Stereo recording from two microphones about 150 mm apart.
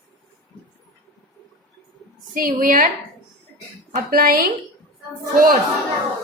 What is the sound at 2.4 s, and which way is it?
Speech, 65° right (ahead or behind).